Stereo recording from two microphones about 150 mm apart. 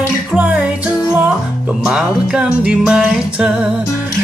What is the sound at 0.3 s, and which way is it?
Music, 10° right (ahead or behind).